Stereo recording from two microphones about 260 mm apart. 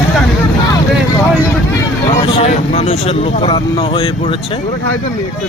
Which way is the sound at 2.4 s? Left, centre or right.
Left.